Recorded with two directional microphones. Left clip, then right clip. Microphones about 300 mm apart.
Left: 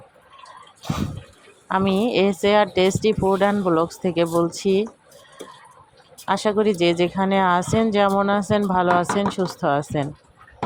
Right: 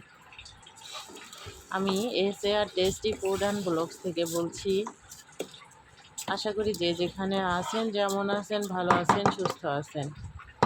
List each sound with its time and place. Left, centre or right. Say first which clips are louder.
1.7 s speech: left 9 dB; left
6.2 s speech: left 10 dB; left